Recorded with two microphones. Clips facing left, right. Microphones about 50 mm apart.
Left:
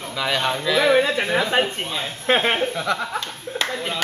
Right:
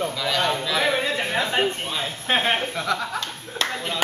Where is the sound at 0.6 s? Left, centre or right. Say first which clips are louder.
Left 4 dB; left.